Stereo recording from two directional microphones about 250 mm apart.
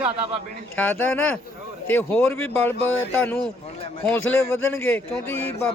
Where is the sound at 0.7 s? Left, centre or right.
Centre.